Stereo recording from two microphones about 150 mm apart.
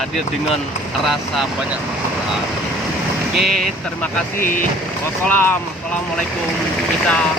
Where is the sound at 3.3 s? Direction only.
Centre (ahead or behind).